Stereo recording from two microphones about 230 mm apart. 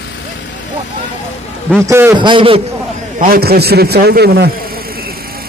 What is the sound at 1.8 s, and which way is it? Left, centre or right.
Speech, centre.